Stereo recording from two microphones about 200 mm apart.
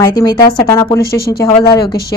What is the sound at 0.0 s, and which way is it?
Speech, 20° left (ahead or behind).